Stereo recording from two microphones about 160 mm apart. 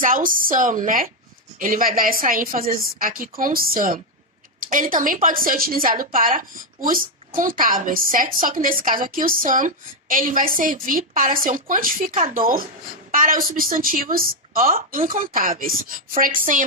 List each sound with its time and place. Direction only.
0.0 s a woman's voice: 60° right (ahead or behind)